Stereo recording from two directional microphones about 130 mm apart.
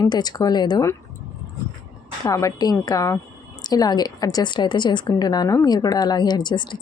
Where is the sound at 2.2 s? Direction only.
30° left (ahead or behind).